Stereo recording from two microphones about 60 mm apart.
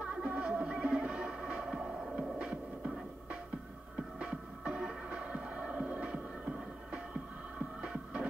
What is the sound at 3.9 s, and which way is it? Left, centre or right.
Music, centre.